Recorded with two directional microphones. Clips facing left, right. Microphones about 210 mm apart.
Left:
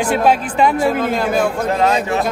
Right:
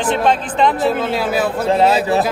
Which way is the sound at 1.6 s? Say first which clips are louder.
Right 2 dB; 30° right (ahead or behind).